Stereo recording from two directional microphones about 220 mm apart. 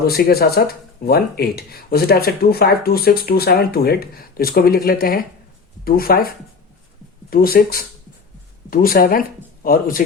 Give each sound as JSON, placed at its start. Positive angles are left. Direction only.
{"t": 0.0, "sound": "speech", "side_deg": 45}